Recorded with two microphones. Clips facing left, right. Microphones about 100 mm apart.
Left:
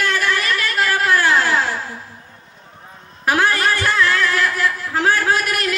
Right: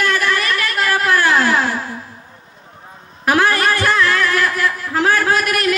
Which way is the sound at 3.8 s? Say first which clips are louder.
Right 2 dB; 60° right (ahead or behind).